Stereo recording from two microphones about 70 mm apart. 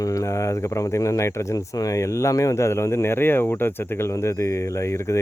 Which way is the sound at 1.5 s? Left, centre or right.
Left.